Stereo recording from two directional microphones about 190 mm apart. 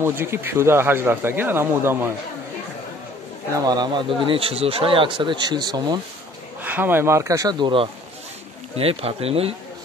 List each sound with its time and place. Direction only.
0.0 s speech: 10° right (ahead or behind)
3.5 s speech: 20° right (ahead or behind)
6.6 s speech: 10° right (ahead or behind); by 9.6 s 30° right (ahead or behind)